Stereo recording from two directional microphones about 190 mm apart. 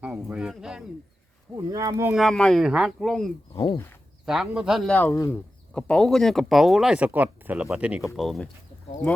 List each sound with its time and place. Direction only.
0.0 s speech: 5° right (ahead or behind)
1.5 s speech: 20° right (ahead or behind)
2.1 s speech: centre (ahead or behind)
4.9 s speech: 15° left (ahead or behind)